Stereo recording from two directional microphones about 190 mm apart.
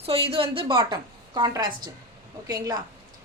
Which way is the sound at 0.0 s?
30° right (ahead or behind).